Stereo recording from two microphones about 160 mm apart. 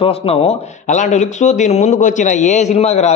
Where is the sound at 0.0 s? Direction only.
35° left (ahead or behind).